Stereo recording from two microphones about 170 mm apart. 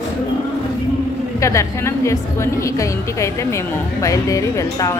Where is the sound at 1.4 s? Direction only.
15° left (ahead or behind).